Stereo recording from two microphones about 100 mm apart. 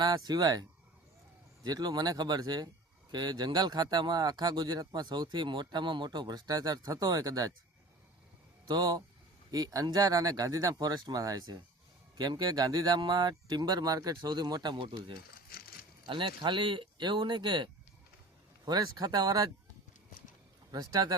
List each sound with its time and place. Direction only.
0.0 s speech: 40° right (ahead or behind)
1.6 s speech: 40° right (ahead or behind)
8.6 s speech: 40° right (ahead or behind)
20.7 s speech: 40° right (ahead or behind)